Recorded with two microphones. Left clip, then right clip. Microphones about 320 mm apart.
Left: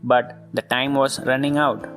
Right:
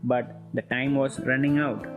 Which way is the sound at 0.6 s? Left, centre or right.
Left.